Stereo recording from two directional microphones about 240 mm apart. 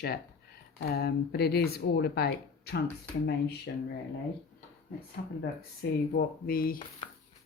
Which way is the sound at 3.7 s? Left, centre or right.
Left.